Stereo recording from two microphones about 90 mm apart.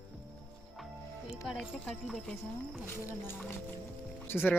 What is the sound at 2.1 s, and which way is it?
Speech, centre (ahead or behind).